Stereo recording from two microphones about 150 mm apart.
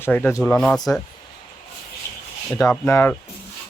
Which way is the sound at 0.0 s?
10° left (ahead or behind).